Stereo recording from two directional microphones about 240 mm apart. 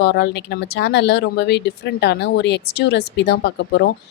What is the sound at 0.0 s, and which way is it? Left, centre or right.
Speech, left.